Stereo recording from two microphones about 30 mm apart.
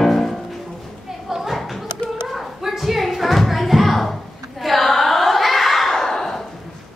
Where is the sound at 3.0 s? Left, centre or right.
Centre.